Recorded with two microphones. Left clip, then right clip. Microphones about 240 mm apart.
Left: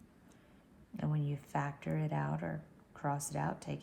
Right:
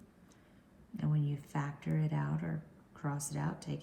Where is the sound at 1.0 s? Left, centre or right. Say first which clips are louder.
Right 1 dB; left.